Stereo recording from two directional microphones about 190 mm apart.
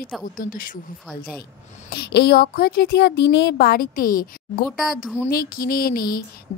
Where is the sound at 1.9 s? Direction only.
60° left (ahead or behind).